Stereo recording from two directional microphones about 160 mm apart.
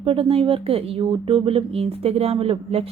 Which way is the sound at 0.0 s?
35° right (ahead or behind).